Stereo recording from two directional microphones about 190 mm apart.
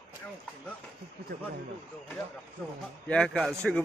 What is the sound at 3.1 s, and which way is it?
Speech, 5° left (ahead or behind).